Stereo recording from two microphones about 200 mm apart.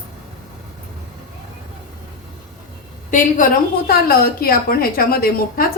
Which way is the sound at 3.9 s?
50° left (ahead or behind).